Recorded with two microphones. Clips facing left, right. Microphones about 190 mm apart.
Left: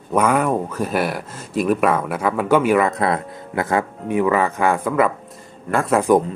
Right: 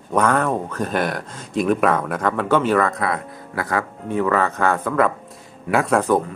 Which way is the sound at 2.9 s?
25° left (ahead or behind).